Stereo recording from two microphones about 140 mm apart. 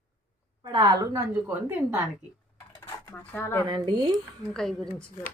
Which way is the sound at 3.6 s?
30° right (ahead or behind).